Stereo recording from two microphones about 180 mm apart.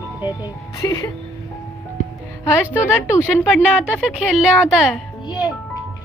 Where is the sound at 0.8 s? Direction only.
20° left (ahead or behind).